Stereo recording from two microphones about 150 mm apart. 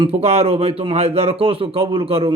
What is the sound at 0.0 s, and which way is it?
A man's voice, 40° right (ahead or behind).